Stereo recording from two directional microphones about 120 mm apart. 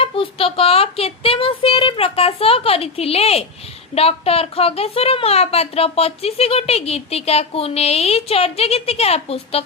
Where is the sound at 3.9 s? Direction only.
55° left (ahead or behind).